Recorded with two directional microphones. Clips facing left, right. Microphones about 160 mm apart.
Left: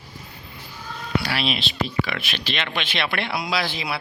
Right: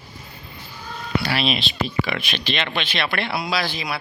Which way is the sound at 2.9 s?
15° left (ahead or behind).